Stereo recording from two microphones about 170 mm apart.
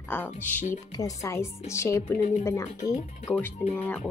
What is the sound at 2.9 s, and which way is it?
Speech, 40° left (ahead or behind).